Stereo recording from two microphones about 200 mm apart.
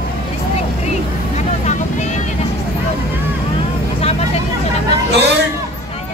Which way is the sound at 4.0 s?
30° left (ahead or behind).